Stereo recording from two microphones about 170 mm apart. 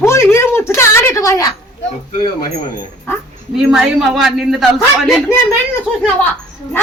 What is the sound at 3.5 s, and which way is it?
A woman's voice, centre (ahead or behind).